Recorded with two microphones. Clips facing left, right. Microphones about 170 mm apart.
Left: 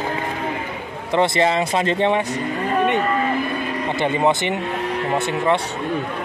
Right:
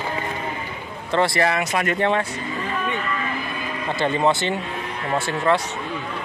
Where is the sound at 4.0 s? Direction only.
15° left (ahead or behind).